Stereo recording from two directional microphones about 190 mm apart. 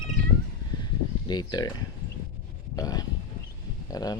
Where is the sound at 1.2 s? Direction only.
20° left (ahead or behind).